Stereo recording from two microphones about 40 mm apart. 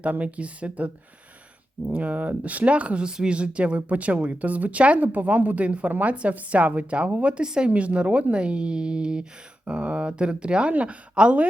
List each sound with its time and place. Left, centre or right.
0.0 s speech: right
1.9 s speech: right
4.9 s speech: right
7.4 s speech: right
7.7 s speech: right
10.7 s speech: right
11.1 s speech: right